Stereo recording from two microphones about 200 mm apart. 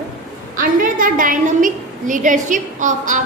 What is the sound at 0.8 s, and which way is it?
A woman's voice, 45° right (ahead or behind).